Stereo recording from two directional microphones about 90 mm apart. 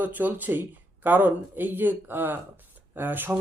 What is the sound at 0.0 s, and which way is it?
Speech, 20° right (ahead or behind).